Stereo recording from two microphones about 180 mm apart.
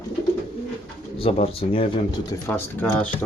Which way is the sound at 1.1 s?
35° left (ahead or behind).